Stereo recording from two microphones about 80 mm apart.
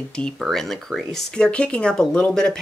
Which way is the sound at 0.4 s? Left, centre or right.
Centre.